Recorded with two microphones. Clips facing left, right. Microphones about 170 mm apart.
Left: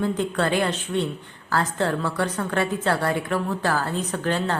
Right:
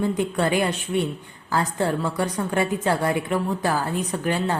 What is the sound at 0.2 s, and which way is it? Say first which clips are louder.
A woman's voice: right 1 dB; 10° right (ahead or behind).